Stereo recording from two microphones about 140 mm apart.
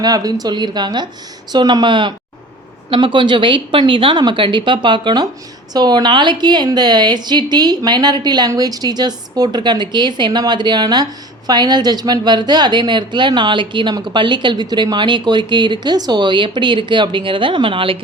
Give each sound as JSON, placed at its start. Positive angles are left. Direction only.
{"t": 0.0, "sound": "a woman's voice", "side_deg": -25}